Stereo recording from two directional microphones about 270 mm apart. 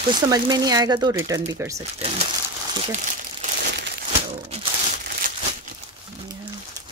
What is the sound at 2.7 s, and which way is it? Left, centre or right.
Crumpling, right.